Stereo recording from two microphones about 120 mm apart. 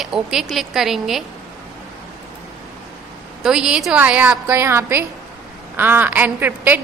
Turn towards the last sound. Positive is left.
turn(degrees=-15)  # may be behind; listen again after turning